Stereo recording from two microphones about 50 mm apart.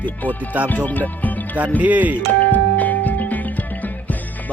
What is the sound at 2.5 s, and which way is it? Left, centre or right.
Music, left.